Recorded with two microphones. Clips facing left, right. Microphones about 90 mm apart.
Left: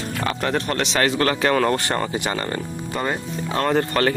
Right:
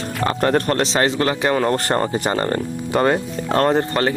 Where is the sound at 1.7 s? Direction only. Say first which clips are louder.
Right 3 dB; 40° right (ahead or behind).